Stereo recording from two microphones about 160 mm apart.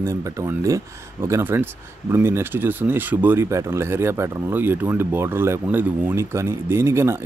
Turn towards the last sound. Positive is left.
turn(degrees=-15)  # may be behind; listen again after turning